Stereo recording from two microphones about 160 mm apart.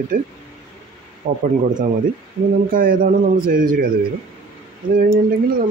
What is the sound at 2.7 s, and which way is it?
A man's voice, 60° right (ahead or behind).